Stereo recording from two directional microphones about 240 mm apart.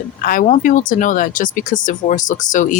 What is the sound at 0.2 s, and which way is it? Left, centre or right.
Speech, left.